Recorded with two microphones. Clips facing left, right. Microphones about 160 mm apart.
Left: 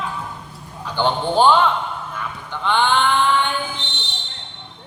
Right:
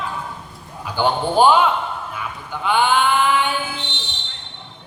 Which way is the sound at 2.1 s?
10° right (ahead or behind).